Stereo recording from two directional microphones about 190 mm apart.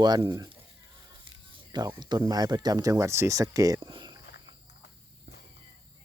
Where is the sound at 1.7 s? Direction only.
20° right (ahead or behind).